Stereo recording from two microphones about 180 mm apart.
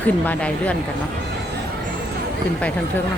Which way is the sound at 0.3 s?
5° left (ahead or behind).